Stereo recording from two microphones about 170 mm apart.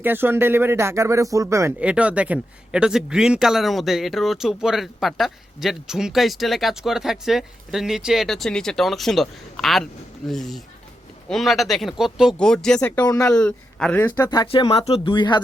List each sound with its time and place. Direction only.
0.0 s speech: 10° right (ahead or behind)
1.8 s a man's voice: 5° right (ahead or behind)
13.1 s speech: 20° left (ahead or behind)
13.3 s a man's voice: 5° left (ahead or behind)
14.2 s speech: 25° left (ahead or behind)